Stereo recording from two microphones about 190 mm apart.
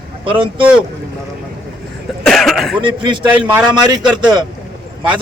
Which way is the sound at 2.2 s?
Centre (ahead or behind).